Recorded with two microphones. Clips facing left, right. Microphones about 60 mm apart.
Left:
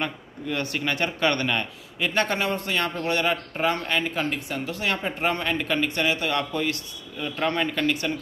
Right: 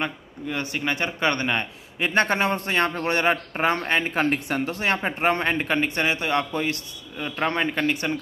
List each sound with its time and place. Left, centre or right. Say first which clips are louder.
0.0 s speech: right 1 dB; centre